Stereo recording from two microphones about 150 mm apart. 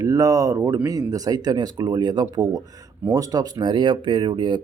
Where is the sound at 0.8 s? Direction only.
25° right (ahead or behind).